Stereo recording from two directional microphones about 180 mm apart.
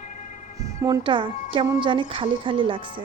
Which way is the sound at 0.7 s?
20° right (ahead or behind).